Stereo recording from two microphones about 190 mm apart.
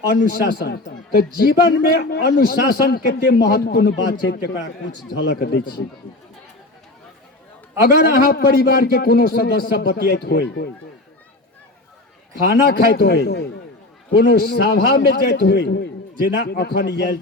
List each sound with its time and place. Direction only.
0.1 s a man's voice: 55° left (ahead or behind)
7.8 s a man's voice: 55° left (ahead or behind)
12.5 s a man's voice: 55° left (ahead or behind)